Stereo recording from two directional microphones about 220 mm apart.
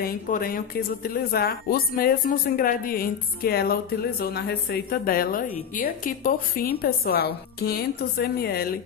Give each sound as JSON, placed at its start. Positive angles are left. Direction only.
{"t": 0.0, "sound": "speech", "side_deg": 40}